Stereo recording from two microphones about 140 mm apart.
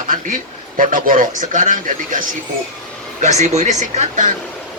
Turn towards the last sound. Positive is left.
turn(degrees=-55)  # may be behind; listen again after turning